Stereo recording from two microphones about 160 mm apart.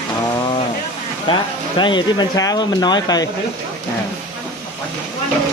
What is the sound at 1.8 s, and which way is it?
Speech, 30° left (ahead or behind).